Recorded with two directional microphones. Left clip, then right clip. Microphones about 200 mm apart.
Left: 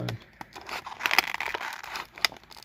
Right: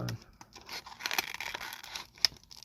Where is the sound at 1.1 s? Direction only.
10° left (ahead or behind).